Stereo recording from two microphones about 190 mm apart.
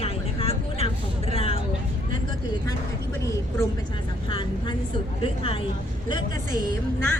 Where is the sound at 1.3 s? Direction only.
30° left (ahead or behind).